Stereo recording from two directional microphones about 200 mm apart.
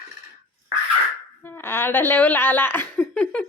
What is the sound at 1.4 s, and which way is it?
A woman's voice, 10° left (ahead or behind).